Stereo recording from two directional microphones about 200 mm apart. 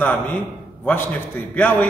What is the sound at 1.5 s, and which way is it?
Speech, 10° left (ahead or behind).